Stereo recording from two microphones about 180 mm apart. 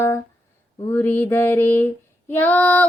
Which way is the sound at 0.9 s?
10° left (ahead or behind).